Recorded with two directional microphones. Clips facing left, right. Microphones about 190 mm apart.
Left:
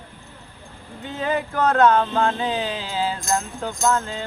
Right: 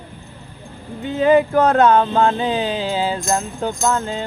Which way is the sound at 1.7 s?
25° right (ahead or behind).